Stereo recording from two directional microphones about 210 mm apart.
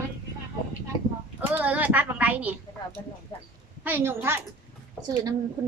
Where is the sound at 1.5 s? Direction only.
10° right (ahead or behind).